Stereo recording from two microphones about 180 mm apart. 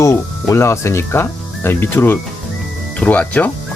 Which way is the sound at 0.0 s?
15° left (ahead or behind).